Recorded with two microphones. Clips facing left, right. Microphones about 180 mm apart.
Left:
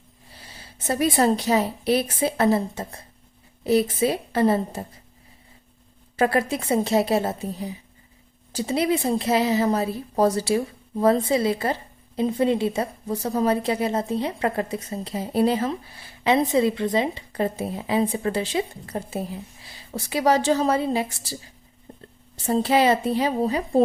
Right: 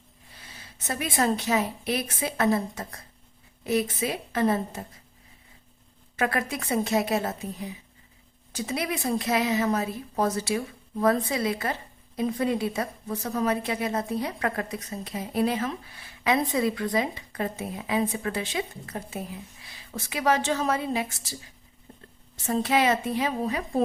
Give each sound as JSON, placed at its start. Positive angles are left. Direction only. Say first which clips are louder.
{"t": 0.3, "sound": "a woman's voice", "louder": "left 3 dB", "side_deg": 30}
{"t": 6.1, "sound": "a woman's voice", "louder": "left 6 dB", "side_deg": 30}